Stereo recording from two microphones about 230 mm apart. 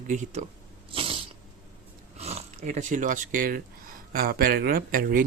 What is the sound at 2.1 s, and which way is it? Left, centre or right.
Speech, right.